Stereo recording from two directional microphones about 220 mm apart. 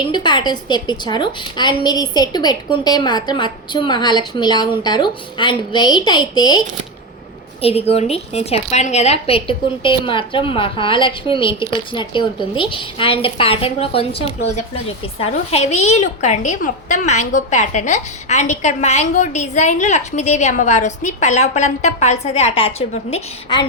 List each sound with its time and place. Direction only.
0.1 s a woman's voice: 20° left (ahead or behind)
7.6 s a woman's voice: 25° left (ahead or behind)